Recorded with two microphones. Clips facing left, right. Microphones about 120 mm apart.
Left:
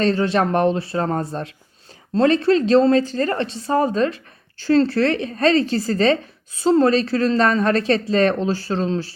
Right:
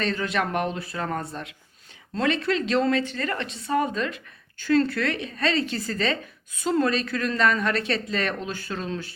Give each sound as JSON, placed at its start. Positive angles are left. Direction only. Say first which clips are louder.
{"t": 0.0, "sound": "speech", "louder": "left 8 dB", "side_deg": 35}